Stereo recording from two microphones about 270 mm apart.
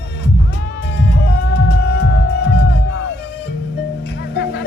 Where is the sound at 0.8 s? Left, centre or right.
Left.